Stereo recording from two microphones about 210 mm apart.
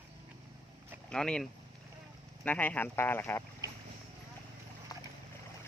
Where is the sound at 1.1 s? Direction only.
5° left (ahead or behind).